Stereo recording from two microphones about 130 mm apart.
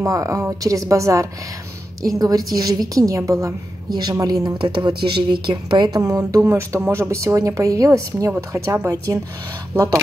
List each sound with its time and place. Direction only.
0.0 s a woman's voice: 25° right (ahead or behind)
6.0 s a woman's voice: 25° right (ahead or behind)